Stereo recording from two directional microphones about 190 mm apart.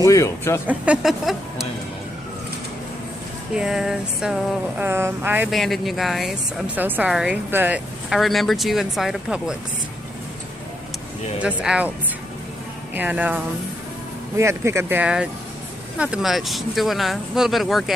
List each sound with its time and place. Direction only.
0.0 s speech: 15° left (ahead or behind)
0.7 s speech: 5° right (ahead or behind)
3.5 s speech: 5° right (ahead or behind)
11.4 s speech: 5° right (ahead or behind)
12.9 s speech: 10° right (ahead or behind)